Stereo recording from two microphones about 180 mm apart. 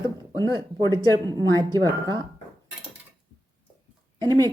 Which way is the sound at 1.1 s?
20° right (ahead or behind).